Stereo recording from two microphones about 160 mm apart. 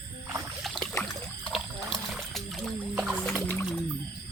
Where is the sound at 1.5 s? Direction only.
Centre (ahead or behind).